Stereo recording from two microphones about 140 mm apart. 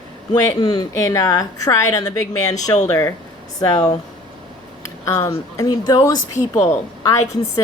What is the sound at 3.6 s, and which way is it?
A woman's voice, 25° left (ahead or behind).